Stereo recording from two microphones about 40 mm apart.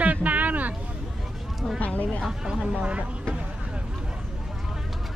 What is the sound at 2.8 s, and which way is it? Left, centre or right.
Speech, right.